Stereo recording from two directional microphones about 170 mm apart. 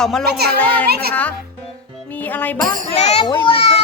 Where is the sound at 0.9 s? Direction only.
65° right (ahead or behind).